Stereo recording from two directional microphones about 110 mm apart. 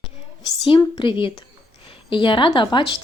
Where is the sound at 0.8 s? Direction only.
50° left (ahead or behind).